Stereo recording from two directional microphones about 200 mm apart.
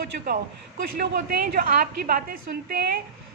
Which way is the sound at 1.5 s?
50° right (ahead or behind).